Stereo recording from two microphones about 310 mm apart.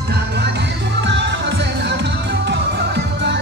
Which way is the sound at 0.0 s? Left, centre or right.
Right.